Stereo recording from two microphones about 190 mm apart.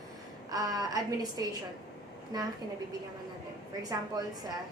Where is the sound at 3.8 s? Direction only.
20° right (ahead or behind).